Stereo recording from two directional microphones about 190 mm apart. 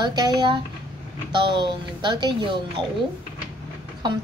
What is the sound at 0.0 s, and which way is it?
A woman's voice, 20° right (ahead or behind).